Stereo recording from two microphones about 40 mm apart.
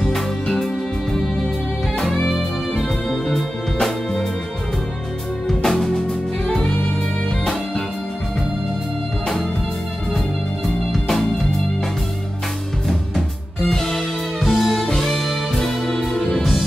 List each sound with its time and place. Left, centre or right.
2.0 s music: centre
5.5 s music: centre
6.4 s music: centre
10.9 s music: centre
13.7 s music: centre